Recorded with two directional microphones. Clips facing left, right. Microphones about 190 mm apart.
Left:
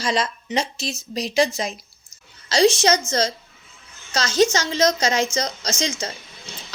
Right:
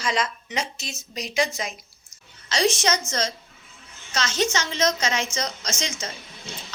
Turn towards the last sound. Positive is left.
turn(degrees=35)  # may be behind; listen again after turning